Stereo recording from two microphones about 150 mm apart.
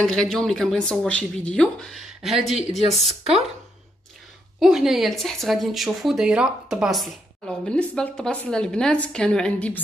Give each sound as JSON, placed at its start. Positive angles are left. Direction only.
{"t": 0.0, "sound": "speech", "side_deg": 5}
{"t": 3.1, "sound": "speech", "side_deg": -40}
{"t": 4.6, "sound": "speech", "side_deg": 0}